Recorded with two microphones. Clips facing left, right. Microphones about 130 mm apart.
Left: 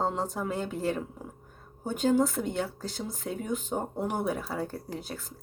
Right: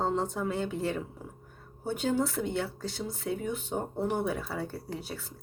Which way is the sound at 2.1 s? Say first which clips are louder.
Left 3 dB; 15° left (ahead or behind).